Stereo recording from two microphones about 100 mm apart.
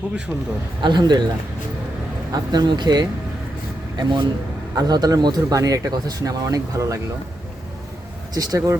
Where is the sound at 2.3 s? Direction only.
45° right (ahead or behind).